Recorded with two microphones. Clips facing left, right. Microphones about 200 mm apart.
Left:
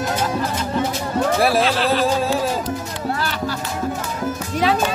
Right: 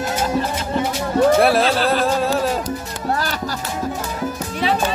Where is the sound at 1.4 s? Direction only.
Centre (ahead or behind).